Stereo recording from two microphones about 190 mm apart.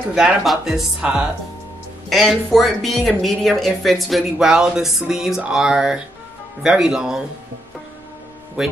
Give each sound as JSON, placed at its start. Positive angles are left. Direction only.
{"t": 0.1, "sound": "speech", "side_deg": 0}
{"t": 8.6, "sound": "speech", "side_deg": 0}